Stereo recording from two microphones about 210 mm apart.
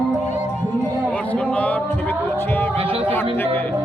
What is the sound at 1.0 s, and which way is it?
Music, 5° left (ahead or behind).